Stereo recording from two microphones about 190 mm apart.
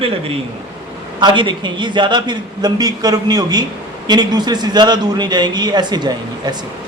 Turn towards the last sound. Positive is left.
turn(degrees=-20)  # may be behind; listen again after turning